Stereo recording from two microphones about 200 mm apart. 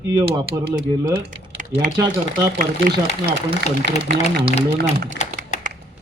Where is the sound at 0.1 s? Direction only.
20° right (ahead or behind).